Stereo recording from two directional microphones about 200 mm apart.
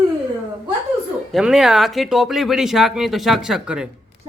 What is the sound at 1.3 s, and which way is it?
Speech, centre (ahead or behind).